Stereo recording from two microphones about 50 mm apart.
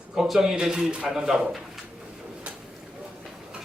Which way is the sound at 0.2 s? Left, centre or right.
Centre.